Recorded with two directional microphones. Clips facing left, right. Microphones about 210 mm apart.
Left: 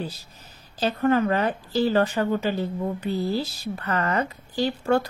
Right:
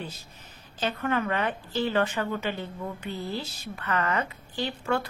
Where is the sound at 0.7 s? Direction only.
35° left (ahead or behind).